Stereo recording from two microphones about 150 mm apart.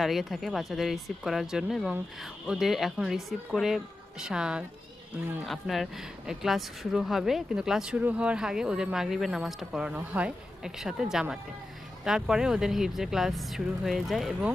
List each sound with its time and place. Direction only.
0.0 s speech: centre (ahead or behind)